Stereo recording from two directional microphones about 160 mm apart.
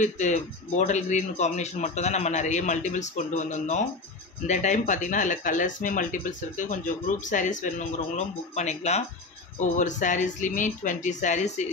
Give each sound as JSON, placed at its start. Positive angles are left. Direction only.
{"t": 0.0, "sound": "speech", "side_deg": 50}